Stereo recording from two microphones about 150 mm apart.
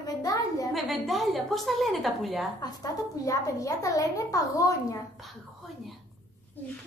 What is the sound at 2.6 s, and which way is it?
A woman's voice, 25° left (ahead or behind).